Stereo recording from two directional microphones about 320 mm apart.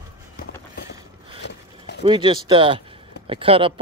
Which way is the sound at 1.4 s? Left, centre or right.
Left.